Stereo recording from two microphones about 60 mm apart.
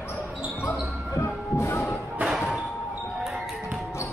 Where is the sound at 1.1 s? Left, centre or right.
Left.